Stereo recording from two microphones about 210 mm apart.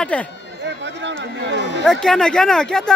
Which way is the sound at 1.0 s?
60° right (ahead or behind).